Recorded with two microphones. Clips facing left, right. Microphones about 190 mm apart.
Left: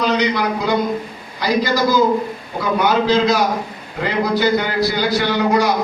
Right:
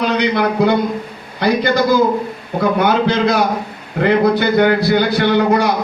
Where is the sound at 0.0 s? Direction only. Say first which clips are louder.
Right 2 dB; 60° right (ahead or behind).